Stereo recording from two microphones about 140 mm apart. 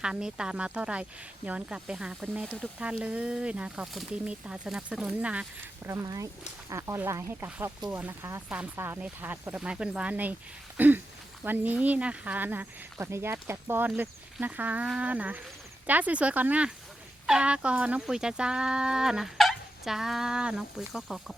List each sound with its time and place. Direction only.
0.0 s speech: 5° right (ahead or behind)
5.9 s speech: 20° right (ahead or behind)
10.8 s a sound: 15° right (ahead or behind)
11.4 s speech: 10° right (ahead or behind)